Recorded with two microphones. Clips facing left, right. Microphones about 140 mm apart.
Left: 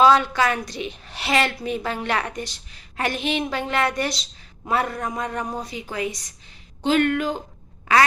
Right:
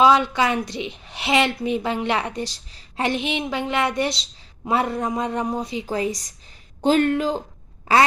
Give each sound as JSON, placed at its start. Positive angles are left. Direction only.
{"t": 0.0, "sound": "a woman's voice", "side_deg": -20}